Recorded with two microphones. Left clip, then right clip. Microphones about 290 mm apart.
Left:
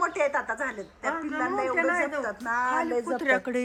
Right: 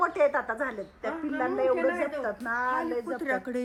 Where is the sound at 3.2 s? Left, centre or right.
Left.